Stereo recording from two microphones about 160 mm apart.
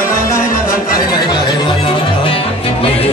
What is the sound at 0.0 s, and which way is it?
Music, 20° left (ahead or behind).